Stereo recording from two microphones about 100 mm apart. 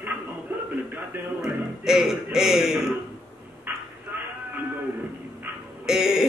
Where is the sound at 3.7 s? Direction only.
20° right (ahead or behind).